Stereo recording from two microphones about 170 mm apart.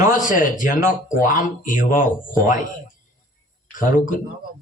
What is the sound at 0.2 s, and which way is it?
A man's voice, 50° left (ahead or behind).